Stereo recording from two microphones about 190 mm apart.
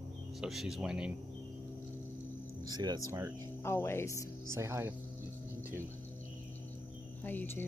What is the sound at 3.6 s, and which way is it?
Speech, 15° left (ahead or behind).